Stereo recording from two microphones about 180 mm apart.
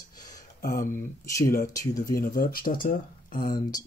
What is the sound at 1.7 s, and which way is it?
Speech, 20° left (ahead or behind).